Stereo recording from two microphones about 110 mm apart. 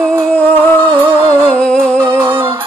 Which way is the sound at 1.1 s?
20° right (ahead or behind).